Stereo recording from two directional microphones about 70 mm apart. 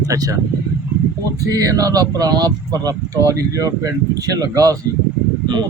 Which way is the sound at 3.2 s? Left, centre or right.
Right.